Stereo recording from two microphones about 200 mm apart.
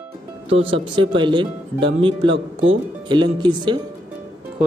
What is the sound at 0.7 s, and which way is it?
Speech, 25° right (ahead or behind).